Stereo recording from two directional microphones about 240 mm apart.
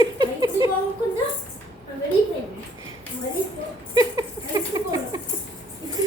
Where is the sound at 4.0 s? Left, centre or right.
Centre.